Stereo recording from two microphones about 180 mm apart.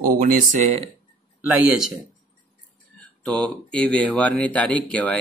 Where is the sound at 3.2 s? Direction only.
5° left (ahead or behind).